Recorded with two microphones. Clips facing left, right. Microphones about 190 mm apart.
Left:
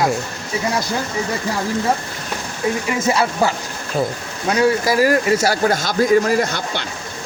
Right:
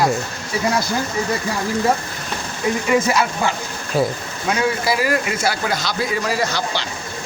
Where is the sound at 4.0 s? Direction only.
5° right (ahead or behind).